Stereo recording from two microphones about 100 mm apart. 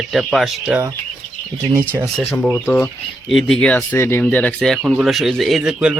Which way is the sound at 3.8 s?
25° left (ahead or behind).